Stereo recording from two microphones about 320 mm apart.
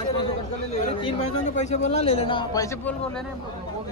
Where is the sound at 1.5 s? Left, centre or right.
Left.